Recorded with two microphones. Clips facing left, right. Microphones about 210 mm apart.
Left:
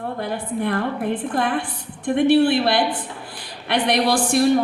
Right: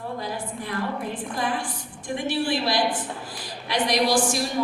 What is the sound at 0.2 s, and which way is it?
A woman's voice, 60° left (ahead or behind).